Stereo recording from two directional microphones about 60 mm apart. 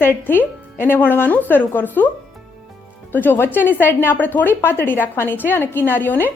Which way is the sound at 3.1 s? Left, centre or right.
Left.